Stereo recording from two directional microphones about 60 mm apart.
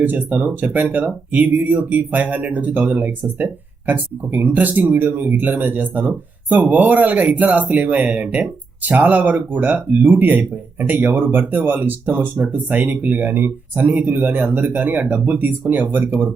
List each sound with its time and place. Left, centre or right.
0.0 s speech: right